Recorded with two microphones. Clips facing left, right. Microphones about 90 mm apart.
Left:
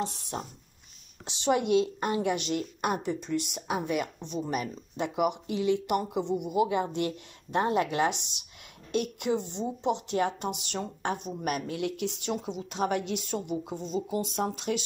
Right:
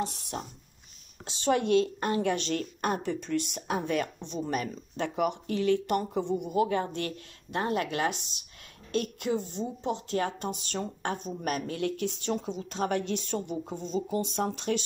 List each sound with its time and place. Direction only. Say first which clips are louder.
0.0 s a woman's voice: even; 25° left (ahead or behind); by 14.8 s 5° left (ahead or behind)